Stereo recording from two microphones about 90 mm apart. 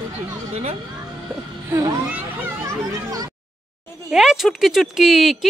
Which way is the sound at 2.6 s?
40° right (ahead or behind).